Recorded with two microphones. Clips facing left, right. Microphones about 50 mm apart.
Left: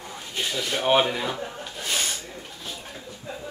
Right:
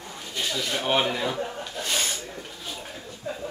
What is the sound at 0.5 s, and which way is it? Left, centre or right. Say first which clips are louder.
Speech: left 3 dB; centre.